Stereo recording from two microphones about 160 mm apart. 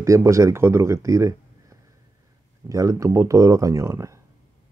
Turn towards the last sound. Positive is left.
turn(degrees=-20)  # may be behind; listen again after turning